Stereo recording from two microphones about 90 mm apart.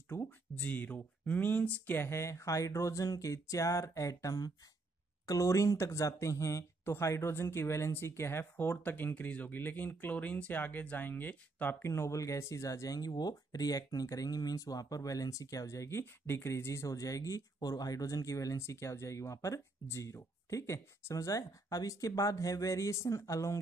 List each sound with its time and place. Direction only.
0.6 s speech: 15° left (ahead or behind)
11.8 s speech: 30° left (ahead or behind)